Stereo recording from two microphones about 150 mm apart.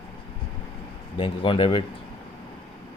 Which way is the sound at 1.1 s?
35° left (ahead or behind).